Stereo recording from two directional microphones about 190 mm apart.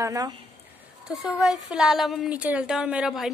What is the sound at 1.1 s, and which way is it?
Speech, centre (ahead or behind).